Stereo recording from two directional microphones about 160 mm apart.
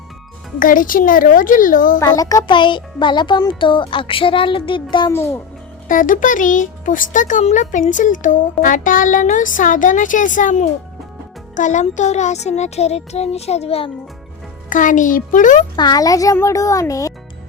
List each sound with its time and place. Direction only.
0.6 s a child's voice: 60° left (ahead or behind)
2.0 s a child's voice: 20° left (ahead or behind)
5.1 s a child's voice: 15° left (ahead or behind)
5.9 s speech: 55° left (ahead or behind); by 13.9 s 35° left (ahead or behind)
14.7 s a child's voice: 55° left (ahead or behind)
15.7 s a child's voice: 25° left (ahead or behind)